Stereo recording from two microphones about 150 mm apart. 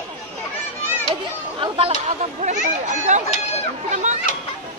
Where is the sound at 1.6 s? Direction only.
40° right (ahead or behind).